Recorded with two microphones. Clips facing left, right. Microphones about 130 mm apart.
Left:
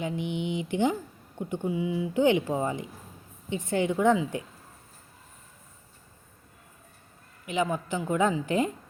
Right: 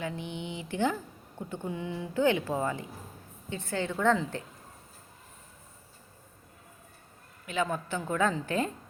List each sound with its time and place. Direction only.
0.0 s speech: 15° left (ahead or behind)
7.4 s speech: 15° left (ahead or behind)